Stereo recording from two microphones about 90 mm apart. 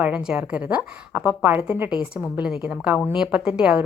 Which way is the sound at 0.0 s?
10° right (ahead or behind).